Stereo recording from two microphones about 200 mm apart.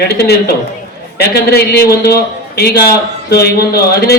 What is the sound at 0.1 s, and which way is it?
A man's voice, 55° left (ahead or behind).